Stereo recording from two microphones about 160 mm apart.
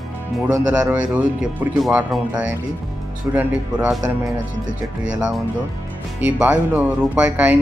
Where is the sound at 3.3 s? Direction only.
10° right (ahead or behind).